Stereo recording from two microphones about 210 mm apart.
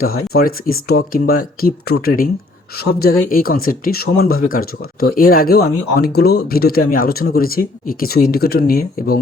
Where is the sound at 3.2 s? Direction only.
40° left (ahead or behind).